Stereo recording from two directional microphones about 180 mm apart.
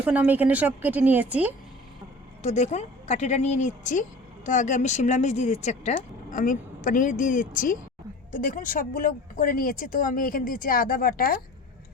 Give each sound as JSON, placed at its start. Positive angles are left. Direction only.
{"t": 0.0, "sound": "a woman's voice", "side_deg": -5}
{"t": 2.4, "sound": "speech", "side_deg": 40}